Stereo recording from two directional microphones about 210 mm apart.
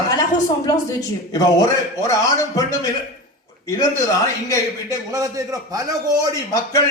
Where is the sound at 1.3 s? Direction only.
15° left (ahead or behind).